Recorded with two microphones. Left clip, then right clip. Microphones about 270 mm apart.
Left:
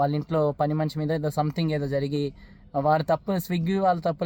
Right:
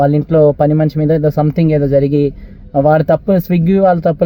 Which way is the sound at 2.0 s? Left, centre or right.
Centre.